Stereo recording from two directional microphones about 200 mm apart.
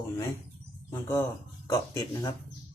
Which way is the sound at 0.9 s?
15° left (ahead or behind).